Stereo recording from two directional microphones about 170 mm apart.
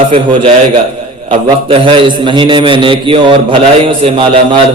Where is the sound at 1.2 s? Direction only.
30° right (ahead or behind).